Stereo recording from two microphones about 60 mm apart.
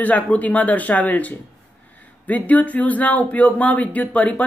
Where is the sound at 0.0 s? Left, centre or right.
Left.